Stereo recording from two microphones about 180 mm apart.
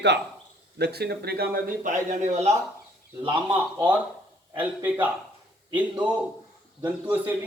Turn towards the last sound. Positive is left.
turn(degrees=-10)  # may be behind; listen again after turning